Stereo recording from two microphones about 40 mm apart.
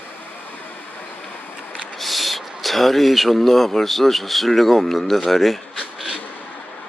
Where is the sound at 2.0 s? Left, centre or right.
Centre.